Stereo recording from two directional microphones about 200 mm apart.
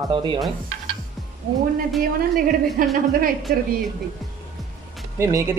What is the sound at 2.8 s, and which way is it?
Speech, 45° right (ahead or behind).